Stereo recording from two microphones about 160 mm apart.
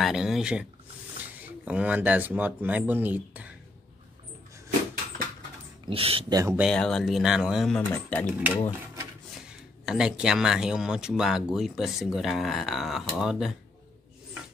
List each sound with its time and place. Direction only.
0.0 s speech: centre (ahead or behind)
5.9 s speech: 35° right (ahead or behind)
6.3 s speech: 20° right (ahead or behind)
6.6 s speech: 5° left (ahead or behind)
7.9 s speech: 10° left (ahead or behind)
9.5 s speech: 5° right (ahead or behind)